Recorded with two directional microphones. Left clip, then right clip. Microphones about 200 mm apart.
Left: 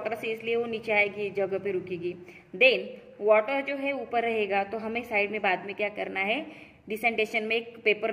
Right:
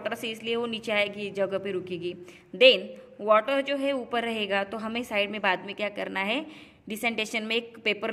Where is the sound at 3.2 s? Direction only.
60° right (ahead or behind).